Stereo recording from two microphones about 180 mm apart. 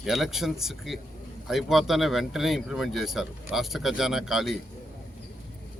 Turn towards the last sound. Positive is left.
turn(degrees=0)  # may be behind; listen again after turning